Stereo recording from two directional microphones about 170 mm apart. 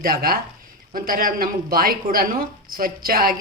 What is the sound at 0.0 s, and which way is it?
A woman's voice, 60° right (ahead or behind).